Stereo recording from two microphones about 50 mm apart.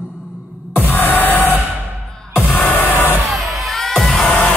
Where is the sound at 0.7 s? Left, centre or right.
Left.